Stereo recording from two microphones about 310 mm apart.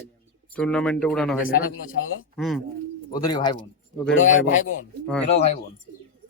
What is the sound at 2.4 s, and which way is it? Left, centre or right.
Speech, centre.